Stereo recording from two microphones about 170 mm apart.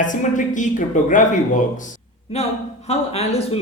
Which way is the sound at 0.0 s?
50° left (ahead or behind).